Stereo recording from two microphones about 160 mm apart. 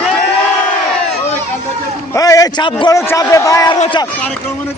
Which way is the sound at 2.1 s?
20° left (ahead or behind).